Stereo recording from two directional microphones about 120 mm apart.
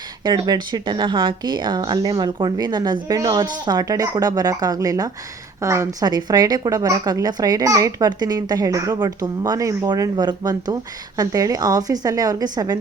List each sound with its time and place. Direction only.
0.3 s a woman's voice: 35° right (ahead or behind)